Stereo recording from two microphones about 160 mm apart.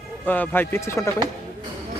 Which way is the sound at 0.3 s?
10° left (ahead or behind).